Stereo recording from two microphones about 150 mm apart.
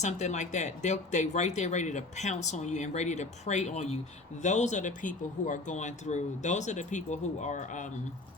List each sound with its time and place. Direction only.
0.0 s speech: 50° left (ahead or behind)